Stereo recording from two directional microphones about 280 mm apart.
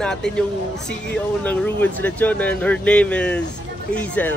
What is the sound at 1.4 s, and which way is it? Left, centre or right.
A man's voice, centre.